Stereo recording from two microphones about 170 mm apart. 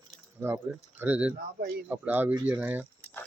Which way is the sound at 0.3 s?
15° right (ahead or behind).